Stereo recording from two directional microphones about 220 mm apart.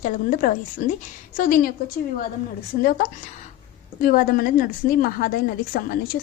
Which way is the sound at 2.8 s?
40° left (ahead or behind).